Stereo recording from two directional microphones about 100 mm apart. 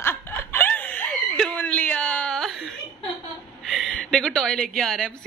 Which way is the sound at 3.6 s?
Centre (ahead or behind).